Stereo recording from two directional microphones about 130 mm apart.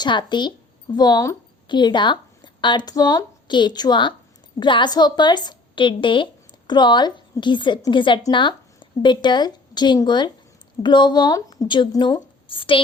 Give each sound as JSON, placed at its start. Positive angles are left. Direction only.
{"t": 0.0, "sound": "a woman's voice", "side_deg": 35}